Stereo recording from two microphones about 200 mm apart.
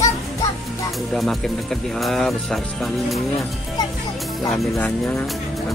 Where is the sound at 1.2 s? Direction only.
Centre (ahead or behind).